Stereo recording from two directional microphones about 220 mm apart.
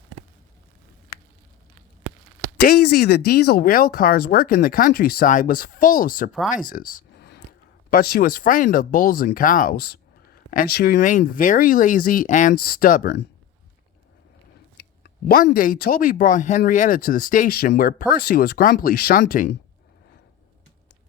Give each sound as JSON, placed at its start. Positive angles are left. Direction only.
{"t": 2.6, "sound": "speech", "side_deg": 45}
{"t": 7.2, "sound": "a sound", "side_deg": 45}
{"t": 7.9, "sound": "speech", "side_deg": 40}
{"t": 14.8, "sound": "speech", "side_deg": 45}